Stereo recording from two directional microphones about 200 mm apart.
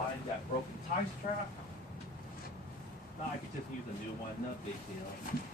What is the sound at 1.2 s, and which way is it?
Speech, 40° left (ahead or behind).